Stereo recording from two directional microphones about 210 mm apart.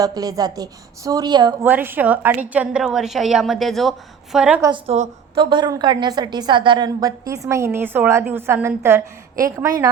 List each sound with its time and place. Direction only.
0.0 s a woman's voice: 15° right (ahead or behind)
1.6 s a woman's voice: 10° right (ahead or behind)
4.6 s a woman's voice: 25° right (ahead or behind)